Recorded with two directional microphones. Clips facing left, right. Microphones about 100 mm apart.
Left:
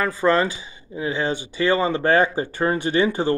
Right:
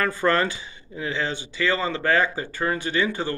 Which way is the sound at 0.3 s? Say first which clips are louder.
Left 3 dB; 25° left (ahead or behind).